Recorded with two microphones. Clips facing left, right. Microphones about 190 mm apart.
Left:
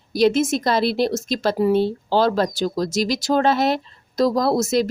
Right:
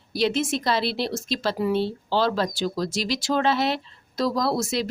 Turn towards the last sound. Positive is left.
turn(degrees=45)  # may be behind; listen again after turning